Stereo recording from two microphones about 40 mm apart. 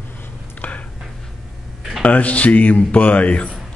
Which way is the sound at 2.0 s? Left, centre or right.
Left.